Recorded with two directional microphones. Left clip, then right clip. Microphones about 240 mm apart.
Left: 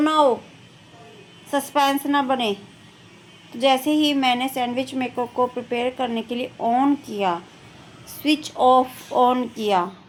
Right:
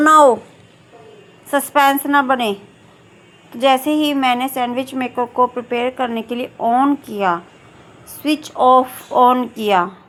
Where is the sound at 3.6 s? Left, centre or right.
Centre.